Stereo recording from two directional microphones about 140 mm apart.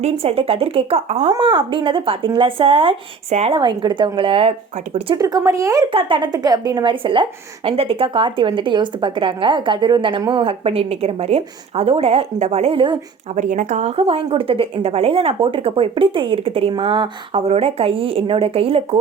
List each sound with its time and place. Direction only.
0.0 s speech: 45° right (ahead or behind)
1.2 s a woman's voice: 35° right (ahead or behind)
3.6 s a woman's voice: 30° right (ahead or behind)
5.1 s speech: 25° right (ahead or behind)
5.9 s a woman's voice: 40° right (ahead or behind)
13.3 s speech: 65° right (ahead or behind)
13.9 s a woman's voice: 40° right (ahead or behind)